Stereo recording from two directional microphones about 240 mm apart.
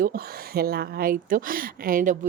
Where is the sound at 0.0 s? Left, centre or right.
Right.